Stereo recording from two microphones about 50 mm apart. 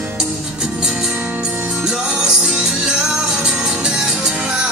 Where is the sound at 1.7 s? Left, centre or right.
Centre.